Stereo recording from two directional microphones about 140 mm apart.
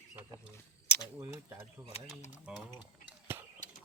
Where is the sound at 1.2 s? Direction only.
15° right (ahead or behind).